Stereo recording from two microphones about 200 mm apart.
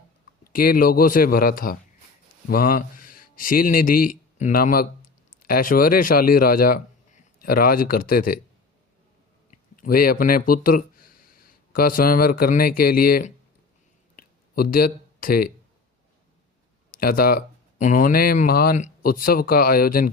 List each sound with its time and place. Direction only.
0.5 s a man's voice: 45° left (ahead or behind)
9.5 s speech: 45° left (ahead or behind)
14.2 s a sound: 45° left (ahead or behind)
16.9 s speech: 50° left (ahead or behind)